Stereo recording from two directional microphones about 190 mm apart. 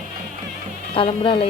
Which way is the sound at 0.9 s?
25° left (ahead or behind).